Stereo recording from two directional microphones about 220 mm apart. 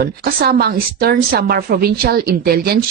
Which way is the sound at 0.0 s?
45° right (ahead or behind).